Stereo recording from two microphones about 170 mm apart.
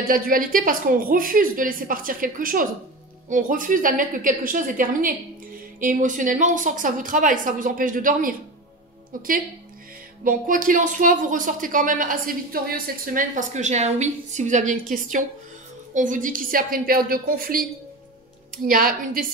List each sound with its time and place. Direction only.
0.1 s a woman's voice: 55° right (ahead or behind)
10.2 s a woman's voice: 50° right (ahead or behind)